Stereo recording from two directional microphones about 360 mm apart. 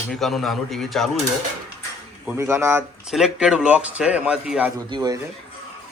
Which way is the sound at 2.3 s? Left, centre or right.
Centre.